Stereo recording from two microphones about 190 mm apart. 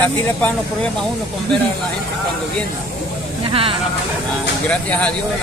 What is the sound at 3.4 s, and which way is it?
Speech, 30° right (ahead or behind).